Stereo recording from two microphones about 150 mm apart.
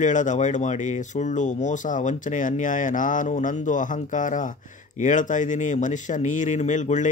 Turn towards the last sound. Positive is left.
turn(degrees=55)  # may be behind; listen again after turning